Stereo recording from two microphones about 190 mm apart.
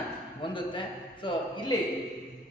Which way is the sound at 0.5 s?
25° left (ahead or behind).